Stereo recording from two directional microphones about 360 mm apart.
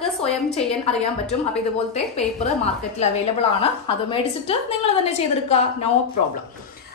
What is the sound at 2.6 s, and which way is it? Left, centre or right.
A woman's voice, centre.